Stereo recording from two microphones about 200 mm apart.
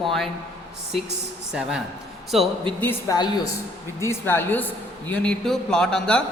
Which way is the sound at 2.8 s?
15° left (ahead or behind).